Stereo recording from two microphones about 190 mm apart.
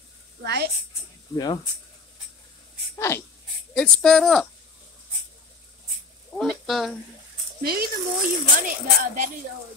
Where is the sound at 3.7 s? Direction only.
5° left (ahead or behind).